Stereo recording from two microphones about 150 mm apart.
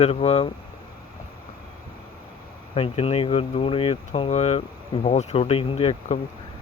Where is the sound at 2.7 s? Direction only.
40° left (ahead or behind).